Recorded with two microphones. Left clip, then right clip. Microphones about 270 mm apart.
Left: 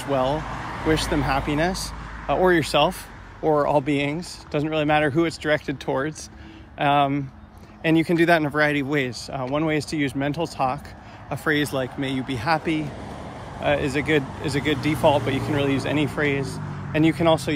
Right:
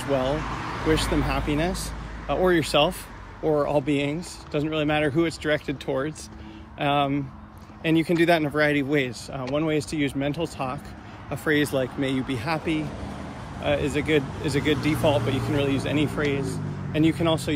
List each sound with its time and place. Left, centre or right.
0.0 s speech: centre
0.5 s vehicle: left
1.5 s speech: centre